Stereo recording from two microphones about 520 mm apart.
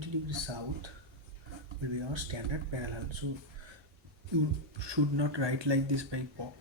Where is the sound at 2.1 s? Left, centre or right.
Right.